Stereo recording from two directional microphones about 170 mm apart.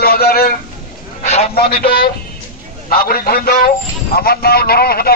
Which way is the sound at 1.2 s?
40° left (ahead or behind).